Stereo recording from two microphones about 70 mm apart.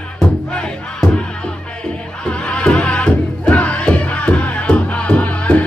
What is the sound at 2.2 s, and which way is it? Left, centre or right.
Music, centre.